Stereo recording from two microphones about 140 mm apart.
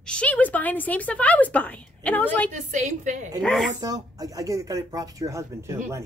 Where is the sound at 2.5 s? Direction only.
60° right (ahead or behind).